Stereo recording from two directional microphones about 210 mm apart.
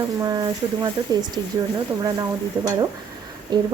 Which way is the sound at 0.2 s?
20° right (ahead or behind).